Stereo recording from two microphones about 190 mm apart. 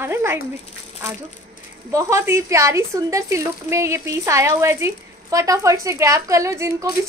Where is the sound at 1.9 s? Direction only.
15° right (ahead or behind).